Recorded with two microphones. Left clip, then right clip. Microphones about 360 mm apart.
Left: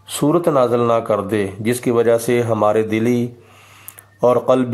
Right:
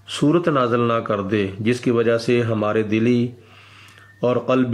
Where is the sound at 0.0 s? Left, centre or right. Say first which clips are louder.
Left 2 dB; centre.